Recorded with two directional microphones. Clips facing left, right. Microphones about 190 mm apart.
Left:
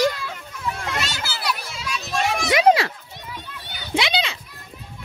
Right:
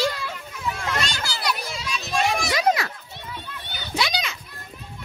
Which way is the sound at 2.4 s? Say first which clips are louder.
Left 5 dB; 25° left (ahead or behind).